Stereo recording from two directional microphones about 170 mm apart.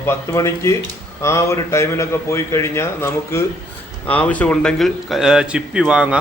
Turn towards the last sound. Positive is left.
turn(degrees=-5)  # may be behind; listen again after turning